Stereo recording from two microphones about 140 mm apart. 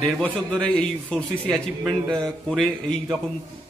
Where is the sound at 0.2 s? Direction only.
5° left (ahead or behind).